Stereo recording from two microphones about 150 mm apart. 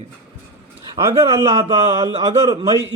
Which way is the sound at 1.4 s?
45° right (ahead or behind).